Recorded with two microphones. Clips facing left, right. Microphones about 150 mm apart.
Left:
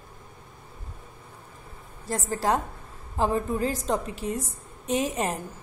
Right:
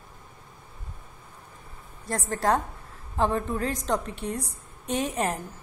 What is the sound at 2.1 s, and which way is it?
Speech, 30° left (ahead or behind).